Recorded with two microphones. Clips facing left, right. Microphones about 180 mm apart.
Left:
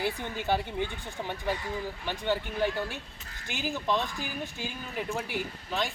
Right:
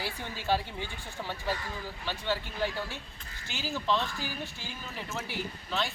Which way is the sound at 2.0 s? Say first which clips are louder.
Left 3 dB; 15° left (ahead or behind).